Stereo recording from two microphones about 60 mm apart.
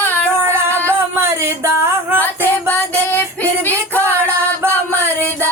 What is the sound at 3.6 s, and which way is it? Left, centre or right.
Music, left.